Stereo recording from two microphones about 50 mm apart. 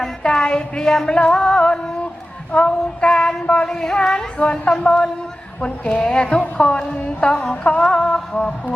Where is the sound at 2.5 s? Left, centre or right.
Left.